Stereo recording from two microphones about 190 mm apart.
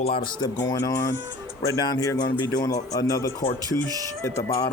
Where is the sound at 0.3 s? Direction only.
20° left (ahead or behind).